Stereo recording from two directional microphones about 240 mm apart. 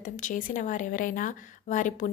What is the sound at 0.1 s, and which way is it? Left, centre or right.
A woman's voice, left.